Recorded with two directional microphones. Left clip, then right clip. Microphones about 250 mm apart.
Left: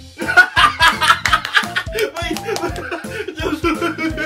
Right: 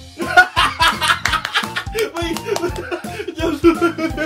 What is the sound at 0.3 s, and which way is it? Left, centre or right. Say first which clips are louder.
Music: left 1 dB; centre.